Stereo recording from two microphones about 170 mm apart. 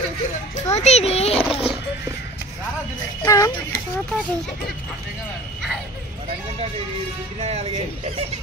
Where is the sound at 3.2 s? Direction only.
20° left (ahead or behind).